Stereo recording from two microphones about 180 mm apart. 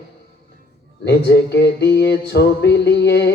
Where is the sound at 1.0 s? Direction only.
65° left (ahead or behind).